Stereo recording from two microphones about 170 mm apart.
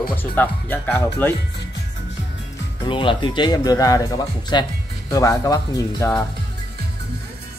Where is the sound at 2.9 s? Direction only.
30° left (ahead or behind).